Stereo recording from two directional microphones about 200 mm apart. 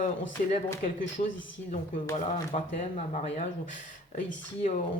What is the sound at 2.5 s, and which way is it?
Speech, 40° left (ahead or behind).